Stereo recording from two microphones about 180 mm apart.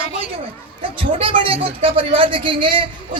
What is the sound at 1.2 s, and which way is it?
A man's voice, 30° right (ahead or behind).